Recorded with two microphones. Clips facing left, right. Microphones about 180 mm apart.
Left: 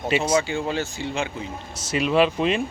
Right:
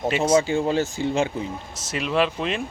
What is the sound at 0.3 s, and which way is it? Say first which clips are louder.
Speech: right 3 dB; 40° right (ahead or behind).